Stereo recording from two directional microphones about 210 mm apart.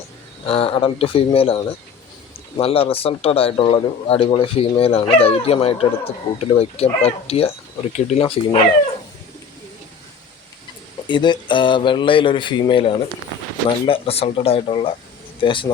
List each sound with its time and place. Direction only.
0.4 s speech: 25° left (ahead or behind)
11.1 s speech: 20° left (ahead or behind)